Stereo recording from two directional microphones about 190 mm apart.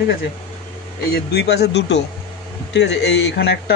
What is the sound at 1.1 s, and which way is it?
Speech, 55° left (ahead or behind).